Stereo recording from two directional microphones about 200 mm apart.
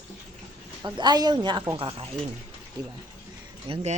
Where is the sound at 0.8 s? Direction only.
20° right (ahead or behind).